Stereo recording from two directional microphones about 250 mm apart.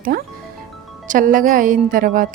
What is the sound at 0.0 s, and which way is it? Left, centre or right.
Speech, right.